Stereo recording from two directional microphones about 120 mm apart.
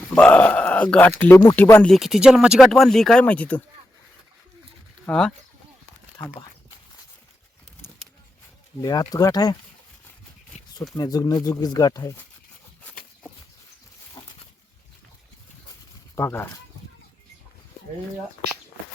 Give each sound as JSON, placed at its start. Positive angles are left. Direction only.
{"t": 0.0, "sound": "a sound", "side_deg": 10}
{"t": 1.2, "sound": "speech", "side_deg": 15}
{"t": 1.8, "sound": "speech", "side_deg": 0}
{"t": 5.0, "sound": "speech", "side_deg": 5}
{"t": 8.8, "sound": "speech", "side_deg": 35}
{"t": 10.9, "sound": "speech", "side_deg": 35}
{"t": 16.1, "sound": "speech", "side_deg": 20}